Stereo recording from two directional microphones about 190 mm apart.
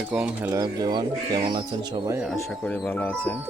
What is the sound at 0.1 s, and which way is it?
Speech, 5° right (ahead or behind).